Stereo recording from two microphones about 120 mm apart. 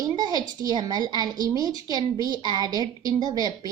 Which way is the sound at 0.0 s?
35° right (ahead or behind).